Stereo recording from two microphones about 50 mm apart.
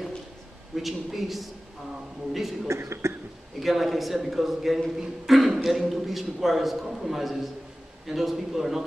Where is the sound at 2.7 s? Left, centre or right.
Right.